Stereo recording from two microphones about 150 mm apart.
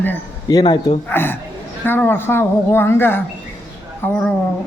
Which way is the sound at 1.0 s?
15° left (ahead or behind).